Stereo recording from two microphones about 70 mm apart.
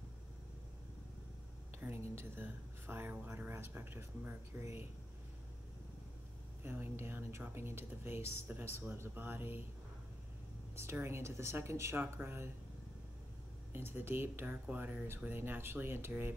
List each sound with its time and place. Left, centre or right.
1.8 s speech: right
6.6 s speech: right
10.8 s speech: right
13.7 s speech: right